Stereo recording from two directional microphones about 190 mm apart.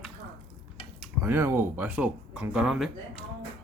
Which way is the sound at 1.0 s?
10° right (ahead or behind).